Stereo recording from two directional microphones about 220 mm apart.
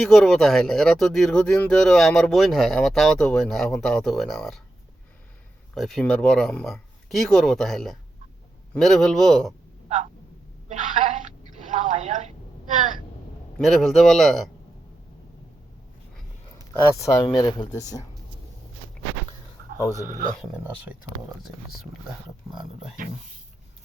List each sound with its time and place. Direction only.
0.0 s speech: centre (ahead or behind)
5.7 s speech: centre (ahead or behind)
10.7 s a sound: 35° right (ahead or behind)
12.6 s speech: 35° right (ahead or behind)
13.6 s speech: centre (ahead or behind)
17.0 s speech: 15° left (ahead or behind)
20.1 s speech: 35° right (ahead or behind)
20.5 s speech: 5° right (ahead or behind)